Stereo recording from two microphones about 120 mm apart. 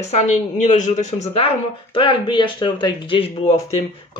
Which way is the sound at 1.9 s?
45° left (ahead or behind).